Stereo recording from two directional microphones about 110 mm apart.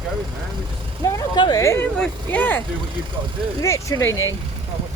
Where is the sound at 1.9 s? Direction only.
10° left (ahead or behind).